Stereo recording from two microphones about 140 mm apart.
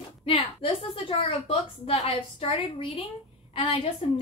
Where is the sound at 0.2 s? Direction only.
40° left (ahead or behind).